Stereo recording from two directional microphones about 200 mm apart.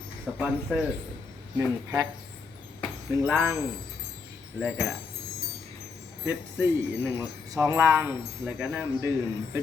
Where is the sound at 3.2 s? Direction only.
10° right (ahead or behind).